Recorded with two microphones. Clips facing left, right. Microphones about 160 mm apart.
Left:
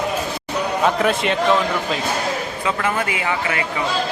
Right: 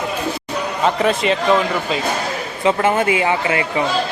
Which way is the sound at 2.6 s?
25° right (ahead or behind).